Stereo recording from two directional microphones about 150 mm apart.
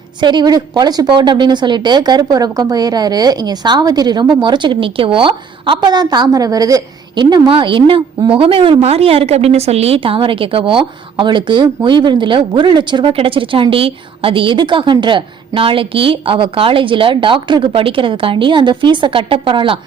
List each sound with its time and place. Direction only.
0.2 s a woman's voice: 30° right (ahead or behind)